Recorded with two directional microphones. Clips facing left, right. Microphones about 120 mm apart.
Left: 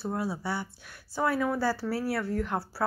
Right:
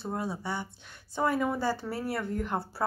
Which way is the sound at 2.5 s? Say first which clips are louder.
Left 1 dB; 5° left (ahead or behind).